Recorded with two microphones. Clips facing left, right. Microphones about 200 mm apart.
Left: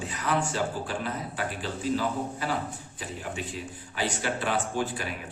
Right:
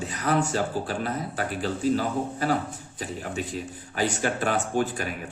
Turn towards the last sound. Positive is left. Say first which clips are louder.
# right 4 dB
turn(degrees=-45)  # may be behind; listen again after turning